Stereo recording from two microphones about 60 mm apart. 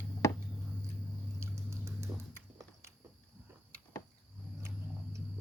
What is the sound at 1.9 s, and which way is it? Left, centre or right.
Horse, right.